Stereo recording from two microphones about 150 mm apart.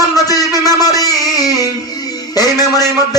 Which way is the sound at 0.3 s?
25° left (ahead or behind).